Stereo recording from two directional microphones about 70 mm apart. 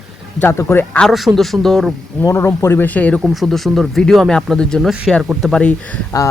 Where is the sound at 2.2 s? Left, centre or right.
Left.